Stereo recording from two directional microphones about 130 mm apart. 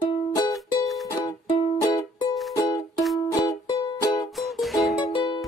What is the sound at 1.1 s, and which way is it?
Music, 25° left (ahead or behind).